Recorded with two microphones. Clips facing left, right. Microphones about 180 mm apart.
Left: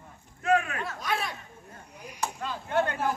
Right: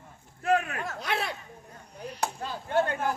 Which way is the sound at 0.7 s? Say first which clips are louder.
Even; 45° right (ahead or behind).